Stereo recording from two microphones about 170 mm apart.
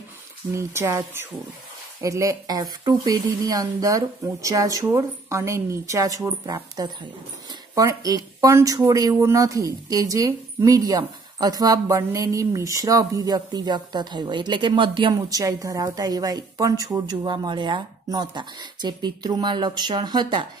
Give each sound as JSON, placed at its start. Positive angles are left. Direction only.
{"t": 0.6, "sound": "speech", "side_deg": -15}